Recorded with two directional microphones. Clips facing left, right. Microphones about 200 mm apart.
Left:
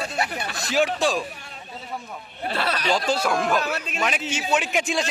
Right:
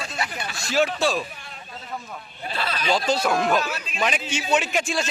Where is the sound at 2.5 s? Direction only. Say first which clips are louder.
Left 3 dB; 65° left (ahead or behind).